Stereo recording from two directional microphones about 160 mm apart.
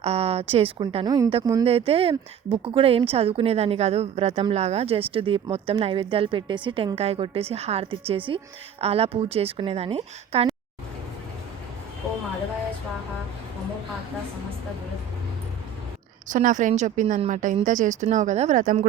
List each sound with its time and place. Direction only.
0.0 s speech: 40° right (ahead or behind)
16.3 s a woman's voice: 55° right (ahead or behind)